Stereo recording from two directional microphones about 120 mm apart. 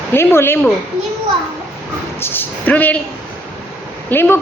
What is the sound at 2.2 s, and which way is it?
Speech, 15° left (ahead or behind).